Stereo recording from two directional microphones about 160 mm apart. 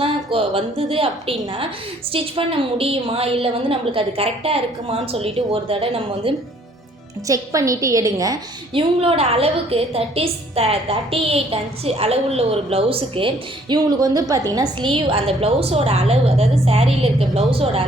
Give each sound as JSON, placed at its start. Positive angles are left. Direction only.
{"t": 0.0, "sound": "a woman's voice", "side_deg": -35}
{"t": 7.3, "sound": "a woman's voice", "side_deg": -20}
{"t": 8.7, "sound": "a woman's voice", "side_deg": -35}